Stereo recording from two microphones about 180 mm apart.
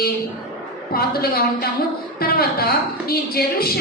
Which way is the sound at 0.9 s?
55° left (ahead or behind).